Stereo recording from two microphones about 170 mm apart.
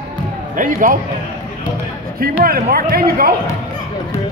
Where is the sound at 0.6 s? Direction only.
55° right (ahead or behind).